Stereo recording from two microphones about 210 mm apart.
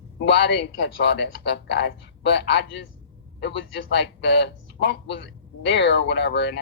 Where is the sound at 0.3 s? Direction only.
55° left (ahead or behind).